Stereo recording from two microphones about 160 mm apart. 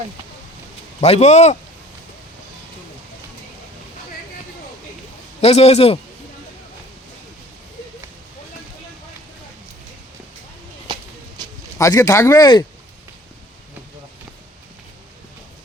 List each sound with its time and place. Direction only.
1.0 s speech: 45° left (ahead or behind)
5.4 s a man's voice: 40° left (ahead or behind)
11.4 s a sound: 25° right (ahead or behind)
11.8 s speech: 20° left (ahead or behind)